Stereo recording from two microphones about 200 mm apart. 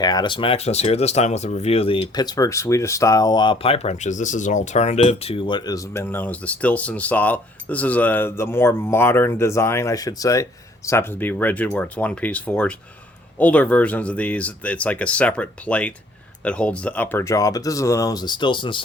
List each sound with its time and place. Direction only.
0.0 s speech: 20° left (ahead or behind)